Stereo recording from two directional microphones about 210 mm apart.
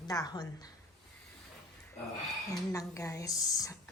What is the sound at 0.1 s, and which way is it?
Speech, 15° left (ahead or behind).